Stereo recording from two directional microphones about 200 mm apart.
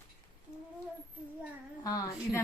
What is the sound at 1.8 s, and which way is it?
Speech, 15° left (ahead or behind).